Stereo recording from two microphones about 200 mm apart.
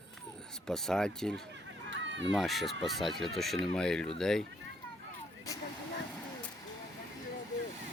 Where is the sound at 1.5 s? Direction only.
65° right (ahead or behind).